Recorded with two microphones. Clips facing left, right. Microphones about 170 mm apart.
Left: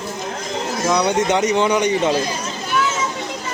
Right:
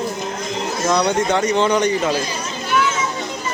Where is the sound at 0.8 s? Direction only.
15° left (ahead or behind).